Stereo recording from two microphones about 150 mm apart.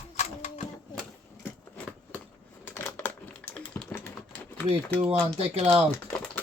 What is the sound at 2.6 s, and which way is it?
Crushing, 15° left (ahead or behind).